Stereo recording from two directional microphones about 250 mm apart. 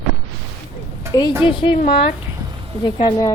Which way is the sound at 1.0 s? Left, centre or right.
Centre.